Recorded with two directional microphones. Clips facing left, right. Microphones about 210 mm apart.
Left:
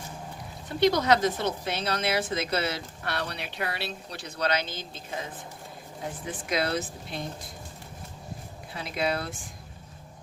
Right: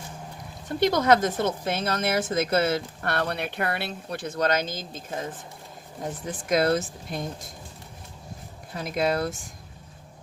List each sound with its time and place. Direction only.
0.8 s a woman's voice: 50° right (ahead or behind)
6.5 s a woman's voice: 45° right (ahead or behind)
8.7 s a woman's voice: 45° right (ahead or behind)